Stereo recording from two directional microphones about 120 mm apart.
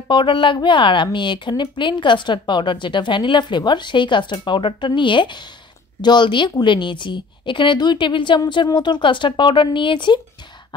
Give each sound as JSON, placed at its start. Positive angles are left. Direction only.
{"t": 0.1, "sound": "a woman's voice", "side_deg": 45}